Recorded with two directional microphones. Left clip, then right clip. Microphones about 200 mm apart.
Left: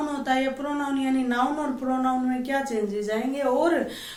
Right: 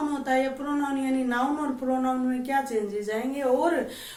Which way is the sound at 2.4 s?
20° left (ahead or behind).